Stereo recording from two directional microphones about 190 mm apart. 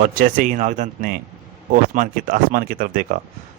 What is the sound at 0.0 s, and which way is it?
Speech, 45° right (ahead or behind).